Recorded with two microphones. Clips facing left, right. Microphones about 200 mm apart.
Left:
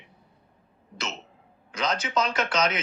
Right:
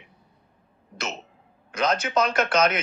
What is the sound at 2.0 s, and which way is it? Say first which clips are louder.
Speech: right 4 dB; 55° right (ahead or behind).